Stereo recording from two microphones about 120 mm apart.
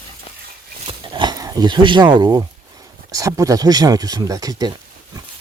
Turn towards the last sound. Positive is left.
turn(degrees=-30)  # may be behind; listen again after turning